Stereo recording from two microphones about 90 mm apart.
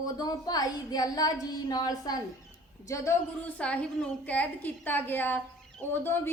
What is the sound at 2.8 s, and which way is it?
Speech, 35° left (ahead or behind).